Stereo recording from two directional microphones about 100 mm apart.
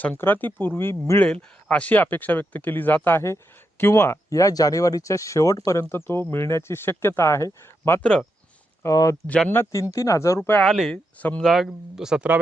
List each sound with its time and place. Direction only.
0.0 s speech: 20° left (ahead or behind)
1.2 s speech: 10° left (ahead or behind); by 8.0 s 30° left (ahead or behind)
8.0 s speech: 10° left (ahead or behind)
8.8 s speech: 35° left (ahead or behind)
9.2 s speech: 15° left (ahead or behind)
9.9 s speech: 30° left (ahead or behind)
10.6 s speech: centre (ahead or behind)
10.9 s speech: 15° left (ahead or behind)
11.4 s speech: centre (ahead or behind)